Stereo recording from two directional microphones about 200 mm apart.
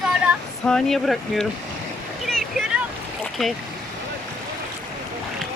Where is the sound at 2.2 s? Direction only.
Centre (ahead or behind).